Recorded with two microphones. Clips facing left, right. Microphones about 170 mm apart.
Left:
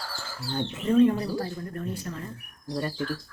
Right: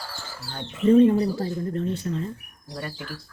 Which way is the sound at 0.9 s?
25° right (ahead or behind).